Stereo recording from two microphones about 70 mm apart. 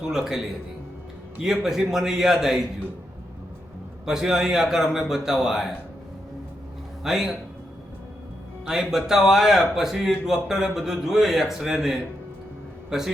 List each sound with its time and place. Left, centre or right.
0.1 s a man's voice: centre
4.0 s a man's voice: centre
7.0 s speech: centre
8.6 s a man's voice: centre